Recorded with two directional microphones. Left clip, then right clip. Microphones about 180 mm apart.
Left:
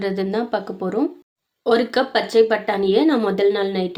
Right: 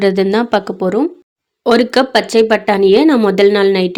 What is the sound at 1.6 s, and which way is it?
Speech, 50° right (ahead or behind).